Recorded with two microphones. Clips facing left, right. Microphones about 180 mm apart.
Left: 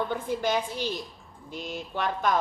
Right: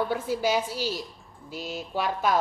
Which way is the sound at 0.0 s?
5° right (ahead or behind).